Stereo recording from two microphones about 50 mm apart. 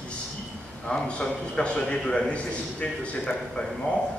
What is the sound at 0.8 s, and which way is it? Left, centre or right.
A man's voice, centre.